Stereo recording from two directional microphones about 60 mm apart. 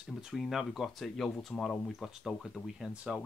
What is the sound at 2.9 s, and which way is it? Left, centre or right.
Speech, centre.